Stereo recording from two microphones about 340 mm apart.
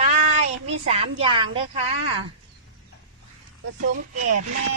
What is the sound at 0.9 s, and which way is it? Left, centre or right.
A woman's voice, centre.